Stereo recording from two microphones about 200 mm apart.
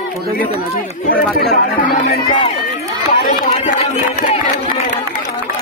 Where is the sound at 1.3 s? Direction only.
50° left (ahead or behind).